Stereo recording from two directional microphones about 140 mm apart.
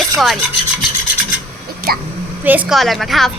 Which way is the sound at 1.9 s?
90° right.